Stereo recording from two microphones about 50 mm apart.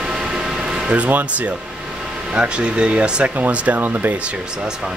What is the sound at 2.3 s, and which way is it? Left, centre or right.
Speech, centre.